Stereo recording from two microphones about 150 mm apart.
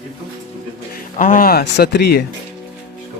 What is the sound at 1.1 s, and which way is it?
Speech, 60° left (ahead or behind).